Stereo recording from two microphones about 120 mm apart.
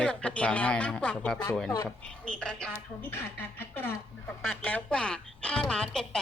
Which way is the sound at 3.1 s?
20° left (ahead or behind).